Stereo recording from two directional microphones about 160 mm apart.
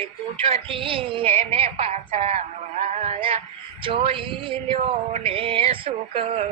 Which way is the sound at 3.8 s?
35° right (ahead or behind).